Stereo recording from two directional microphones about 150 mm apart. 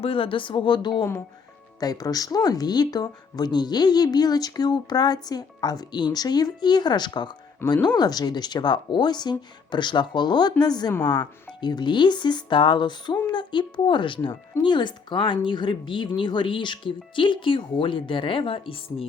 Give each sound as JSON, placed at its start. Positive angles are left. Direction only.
{"t": 0.0, "sound": "a woman's voice", "side_deg": 35}
{"t": 7.6, "sound": "speech", "side_deg": 15}
{"t": 7.9, "sound": "a woman's voice", "side_deg": 25}